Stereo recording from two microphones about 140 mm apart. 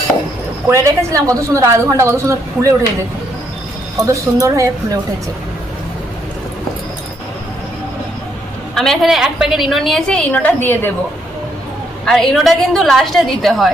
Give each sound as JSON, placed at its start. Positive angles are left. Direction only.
{"t": 0.7, "sound": "a woman's voice", "side_deg": -20}
{"t": 3.9, "sound": "a woman's voice", "side_deg": -25}
{"t": 8.7, "sound": "a woman's voice", "side_deg": 5}
{"t": 12.0, "sound": "a woman's voice", "side_deg": 0}